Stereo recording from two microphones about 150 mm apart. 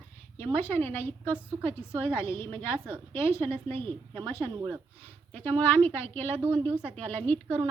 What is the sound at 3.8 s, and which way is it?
Speech, 35° right (ahead or behind).